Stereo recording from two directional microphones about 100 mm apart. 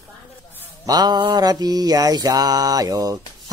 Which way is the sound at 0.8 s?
40° right (ahead or behind).